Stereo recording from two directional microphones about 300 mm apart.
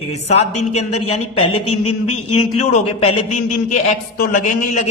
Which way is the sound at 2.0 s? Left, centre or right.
Left.